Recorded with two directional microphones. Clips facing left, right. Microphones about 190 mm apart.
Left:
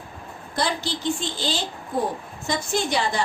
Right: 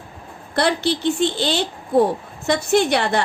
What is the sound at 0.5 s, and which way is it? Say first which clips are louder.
A woman's voice: right 7 dB; 65° right (ahead or behind).